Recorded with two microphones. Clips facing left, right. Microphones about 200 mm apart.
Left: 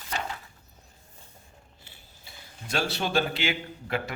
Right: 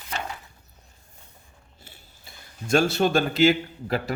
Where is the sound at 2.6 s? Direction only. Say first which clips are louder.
Right 9 dB; 45° right (ahead or behind).